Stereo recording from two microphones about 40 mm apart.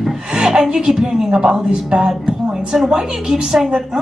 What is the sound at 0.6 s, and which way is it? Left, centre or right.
A woman's voice, centre.